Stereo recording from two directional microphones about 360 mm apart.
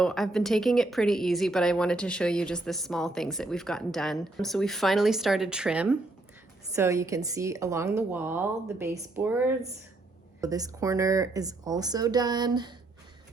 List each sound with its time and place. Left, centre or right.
0.0 s a woman's voice: centre